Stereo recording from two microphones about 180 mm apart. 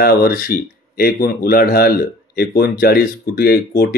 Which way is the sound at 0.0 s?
60° left (ahead or behind).